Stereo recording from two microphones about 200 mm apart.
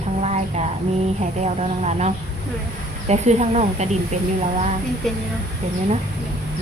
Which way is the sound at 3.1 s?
35° right (ahead or behind).